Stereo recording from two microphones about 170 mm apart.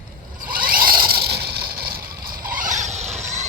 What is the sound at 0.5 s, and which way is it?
Vehicle, 55° right (ahead or behind).